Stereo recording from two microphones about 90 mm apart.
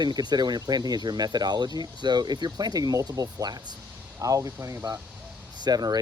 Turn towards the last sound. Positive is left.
turn(degrees=-50)  # may be behind; listen again after turning